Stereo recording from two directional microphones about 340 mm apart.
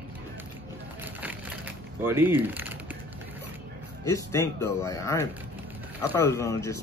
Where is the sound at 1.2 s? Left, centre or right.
Centre.